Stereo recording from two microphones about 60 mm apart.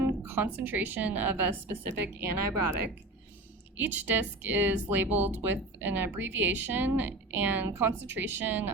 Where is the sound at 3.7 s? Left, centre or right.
Right.